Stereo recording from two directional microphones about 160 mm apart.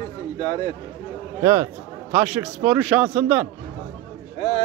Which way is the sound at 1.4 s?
20° right (ahead or behind).